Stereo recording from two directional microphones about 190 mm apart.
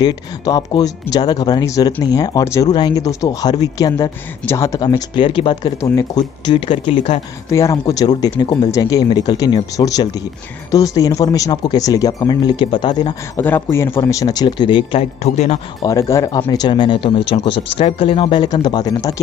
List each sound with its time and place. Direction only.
0.0 s speech: 20° left (ahead or behind)
13.4 s a man's voice: 10° left (ahead or behind); by 15.6 s 35° left (ahead or behind)
15.8 s a man's voice: 15° left (ahead or behind)